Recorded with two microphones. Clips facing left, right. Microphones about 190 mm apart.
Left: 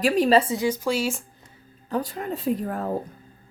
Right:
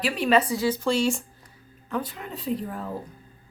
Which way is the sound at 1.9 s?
40° left (ahead or behind).